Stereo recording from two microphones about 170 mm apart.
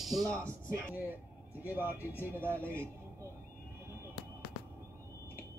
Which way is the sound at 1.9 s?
15° left (ahead or behind).